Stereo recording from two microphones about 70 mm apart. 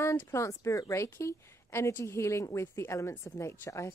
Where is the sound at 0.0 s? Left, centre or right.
Left.